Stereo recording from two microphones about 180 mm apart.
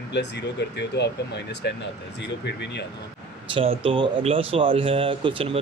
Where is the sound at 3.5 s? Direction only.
30° right (ahead or behind).